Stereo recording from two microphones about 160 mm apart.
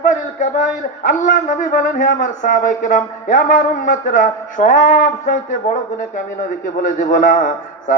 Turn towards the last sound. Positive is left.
turn(degrees=55)  # may be behind; listen again after turning